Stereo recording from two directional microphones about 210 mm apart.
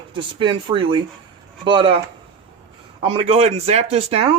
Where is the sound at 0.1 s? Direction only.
25° right (ahead or behind).